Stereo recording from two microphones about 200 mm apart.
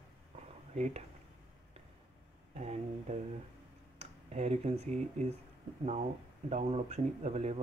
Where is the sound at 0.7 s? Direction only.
35° right (ahead or behind).